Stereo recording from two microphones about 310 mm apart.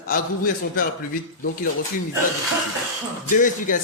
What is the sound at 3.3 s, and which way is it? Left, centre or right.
Speech, left.